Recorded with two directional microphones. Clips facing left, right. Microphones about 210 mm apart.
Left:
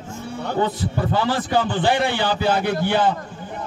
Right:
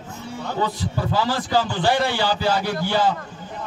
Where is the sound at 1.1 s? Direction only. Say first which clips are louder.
Even; 55° left (ahead or behind).